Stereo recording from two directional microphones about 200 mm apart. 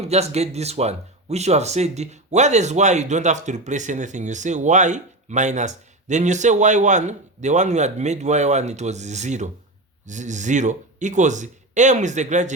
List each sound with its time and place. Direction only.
0.0 s speech: 30° right (ahead or behind)